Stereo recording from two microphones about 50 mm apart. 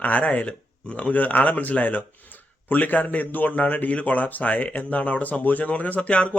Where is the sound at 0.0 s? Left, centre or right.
Left.